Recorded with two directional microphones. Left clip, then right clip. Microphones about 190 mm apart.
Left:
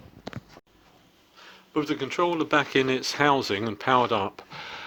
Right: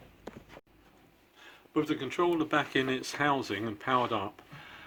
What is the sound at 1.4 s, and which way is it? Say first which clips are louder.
Speech: left 3 dB; 40° left (ahead or behind).